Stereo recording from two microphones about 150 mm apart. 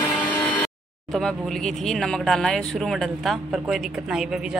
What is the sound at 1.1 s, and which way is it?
Speech, centre (ahead or behind).